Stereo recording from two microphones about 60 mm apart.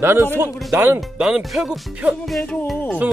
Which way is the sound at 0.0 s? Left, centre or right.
Right.